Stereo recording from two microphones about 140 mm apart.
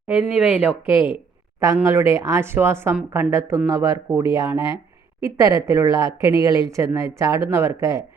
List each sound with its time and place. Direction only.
0.1 s speech: 10° right (ahead or behind)
1.6 s speech: 20° right (ahead or behind)